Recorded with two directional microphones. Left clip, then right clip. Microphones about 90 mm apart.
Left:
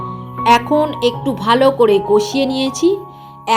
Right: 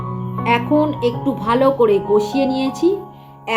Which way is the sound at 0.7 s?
35° left (ahead or behind).